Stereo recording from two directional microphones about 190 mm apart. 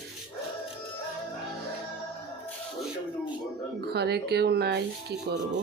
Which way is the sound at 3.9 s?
60° right (ahead or behind).